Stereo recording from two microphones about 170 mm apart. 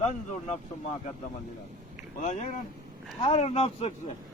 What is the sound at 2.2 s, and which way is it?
A man's voice, 45° left (ahead or behind).